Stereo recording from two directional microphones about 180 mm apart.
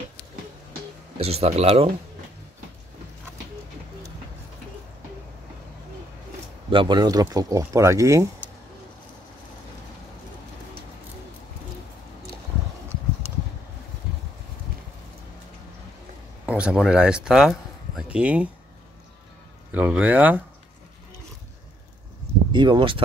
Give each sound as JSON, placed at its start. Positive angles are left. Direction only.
{"t": 1.1, "sound": "speech", "side_deg": -35}
{"t": 6.7, "sound": "speech", "side_deg": -25}
{"t": 16.4, "sound": "speech", "side_deg": -5}
{"t": 19.7, "sound": "speech", "side_deg": -10}
{"t": 22.5, "sound": "speech", "side_deg": -25}